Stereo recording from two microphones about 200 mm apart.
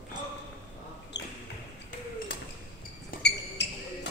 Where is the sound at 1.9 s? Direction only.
45° left (ahead or behind).